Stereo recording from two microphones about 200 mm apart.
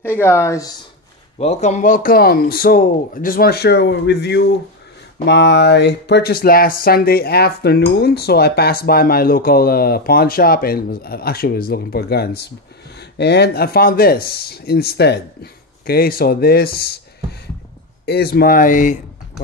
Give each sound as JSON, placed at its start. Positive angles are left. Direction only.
{"t": 0.0, "sound": "speech", "side_deg": 10}
{"t": 1.4, "sound": "speech", "side_deg": 35}